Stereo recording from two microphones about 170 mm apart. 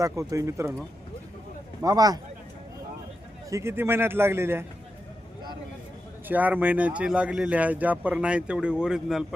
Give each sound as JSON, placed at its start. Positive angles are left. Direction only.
{"t": 0.0, "sound": "speech", "side_deg": -20}
{"t": 1.8, "sound": "speech", "side_deg": -20}
{"t": 3.5, "sound": "speech", "side_deg": -15}
{"t": 6.2, "sound": "speech", "side_deg": -10}